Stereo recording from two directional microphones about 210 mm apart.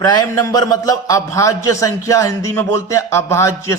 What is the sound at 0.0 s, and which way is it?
A man's voice, 20° left (ahead or behind).